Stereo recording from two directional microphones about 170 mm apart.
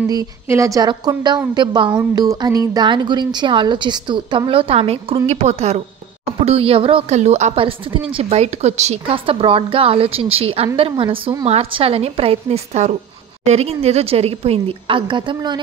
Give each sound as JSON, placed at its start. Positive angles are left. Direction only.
{"t": 0.1, "sound": "a woman's voice", "side_deg": -20}